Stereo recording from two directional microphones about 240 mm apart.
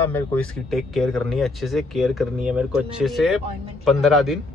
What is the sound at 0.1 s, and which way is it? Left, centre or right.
Speech, centre.